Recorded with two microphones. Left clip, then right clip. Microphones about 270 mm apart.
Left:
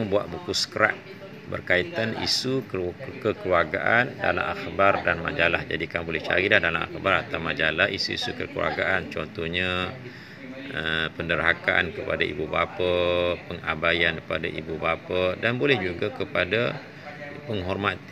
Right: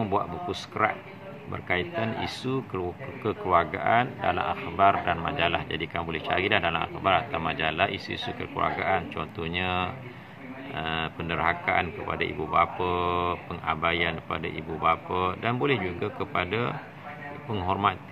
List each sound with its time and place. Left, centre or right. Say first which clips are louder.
1.7 s speech: left 4 dB; centre